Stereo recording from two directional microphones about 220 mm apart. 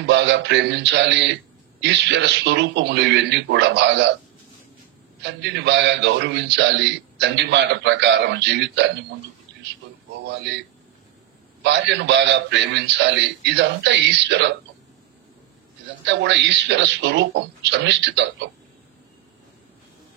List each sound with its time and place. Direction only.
0.0 s a man's voice: 55° right (ahead or behind)
5.2 s a man's voice: 50° right (ahead or behind)
9.5 s a sound: 55° right (ahead or behind)
10.2 s a man's voice: 50° right (ahead or behind)
11.6 s a man's voice: 50° right (ahead or behind)
16.1 s a man's voice: 55° right (ahead or behind)